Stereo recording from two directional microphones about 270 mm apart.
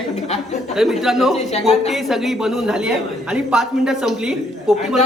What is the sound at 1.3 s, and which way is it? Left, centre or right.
Speech, left.